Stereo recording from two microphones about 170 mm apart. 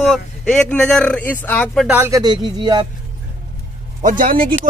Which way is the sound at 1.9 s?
15° right (ahead or behind).